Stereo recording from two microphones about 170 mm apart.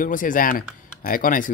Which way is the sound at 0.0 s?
50° left (ahead or behind).